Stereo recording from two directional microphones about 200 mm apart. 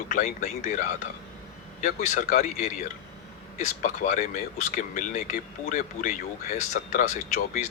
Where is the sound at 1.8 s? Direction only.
35° left (ahead or behind).